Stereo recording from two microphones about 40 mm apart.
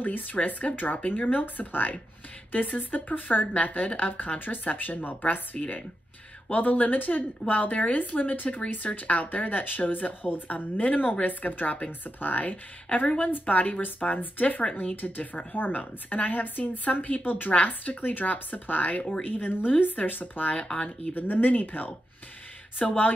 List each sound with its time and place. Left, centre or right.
0.0 s a woman's voice: left
14.6 s speech: left
15.0 s a woman's voice: left
20.6 s speech: left
21.1 s a woman's voice: left